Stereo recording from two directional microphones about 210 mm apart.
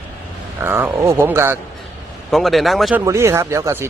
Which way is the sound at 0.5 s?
10° right (ahead or behind).